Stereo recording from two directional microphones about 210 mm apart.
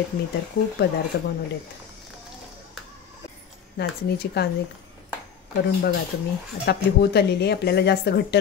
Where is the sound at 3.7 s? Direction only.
50° left (ahead or behind).